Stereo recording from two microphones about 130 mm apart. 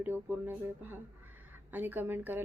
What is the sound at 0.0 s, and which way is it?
Speech, 15° right (ahead or behind).